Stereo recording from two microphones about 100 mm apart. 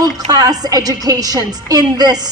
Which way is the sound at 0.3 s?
40° right (ahead or behind).